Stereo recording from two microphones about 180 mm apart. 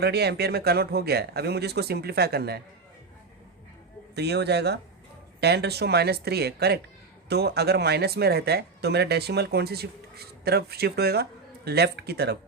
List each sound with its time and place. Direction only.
0.0 s speech: 65° right (ahead or behind)
4.1 s speech: 70° right (ahead or behind)